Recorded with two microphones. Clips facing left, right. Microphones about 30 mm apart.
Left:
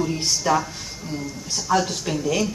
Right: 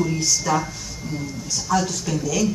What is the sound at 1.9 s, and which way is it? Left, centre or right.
Speech, left.